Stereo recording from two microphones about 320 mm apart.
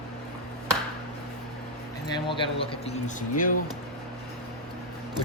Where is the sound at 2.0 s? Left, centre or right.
Centre.